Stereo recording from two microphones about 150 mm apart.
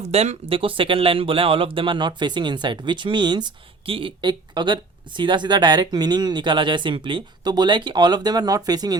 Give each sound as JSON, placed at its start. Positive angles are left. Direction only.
{"t": 0.0, "sound": "speech", "side_deg": -45}